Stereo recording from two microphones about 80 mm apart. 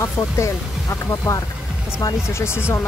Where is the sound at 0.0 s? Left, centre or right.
Left.